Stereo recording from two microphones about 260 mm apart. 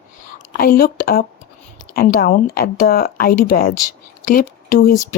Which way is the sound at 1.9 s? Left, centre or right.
Left.